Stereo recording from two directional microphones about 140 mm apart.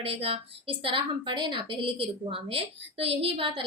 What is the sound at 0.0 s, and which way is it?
A woman's voice, 45° right (ahead or behind).